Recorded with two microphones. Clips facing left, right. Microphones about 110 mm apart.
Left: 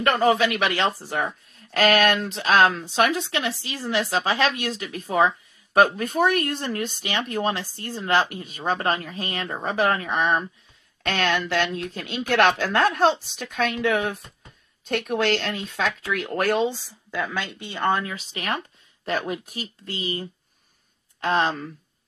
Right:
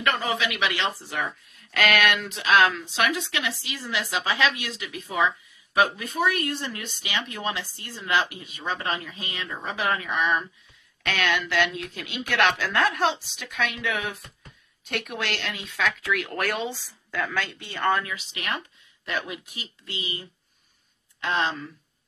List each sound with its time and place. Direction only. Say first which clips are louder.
0.0 s speech: left 7 dB; 45° left (ahead or behind); by 18.0 s 20° left (ahead or behind)
18.0 s speech: left 3 dB; 40° left (ahead or behind)